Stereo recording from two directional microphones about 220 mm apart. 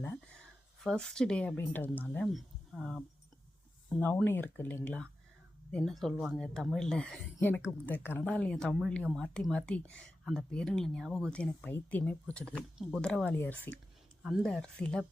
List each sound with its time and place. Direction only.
0.9 s speech: 5° left (ahead or behind)